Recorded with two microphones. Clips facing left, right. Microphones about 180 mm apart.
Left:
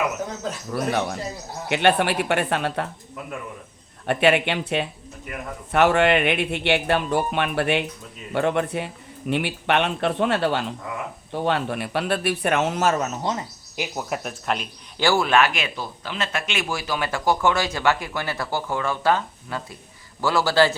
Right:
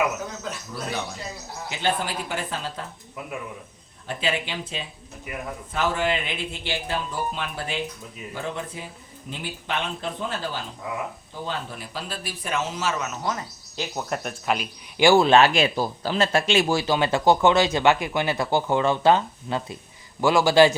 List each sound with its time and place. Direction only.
0.7 s a man's voice: 65° left (ahead or behind)
4.0 s a man's voice: 65° left (ahead or behind); by 13.1 s 50° left (ahead or behind)
13.1 s speech: 25° left (ahead or behind)
13.7 s speech: 10° left (ahead or behind)
14.9 s a man's voice: 15° right (ahead or behind)